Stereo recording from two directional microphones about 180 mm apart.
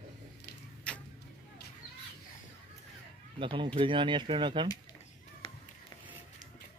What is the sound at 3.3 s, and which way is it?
Speech, 25° right (ahead or behind).